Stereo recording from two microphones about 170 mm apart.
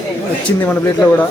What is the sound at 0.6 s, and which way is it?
Speech, 10° left (ahead or behind).